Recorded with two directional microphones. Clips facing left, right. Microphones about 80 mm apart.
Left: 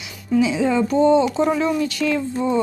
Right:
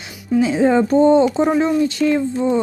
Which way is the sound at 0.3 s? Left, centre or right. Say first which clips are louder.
Right 3 dB; right.